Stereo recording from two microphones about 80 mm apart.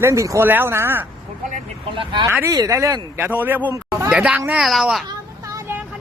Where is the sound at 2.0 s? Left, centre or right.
Right.